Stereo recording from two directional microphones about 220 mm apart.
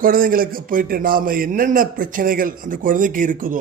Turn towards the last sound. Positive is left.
turn(degrees=-40)  # may be behind; listen again after turning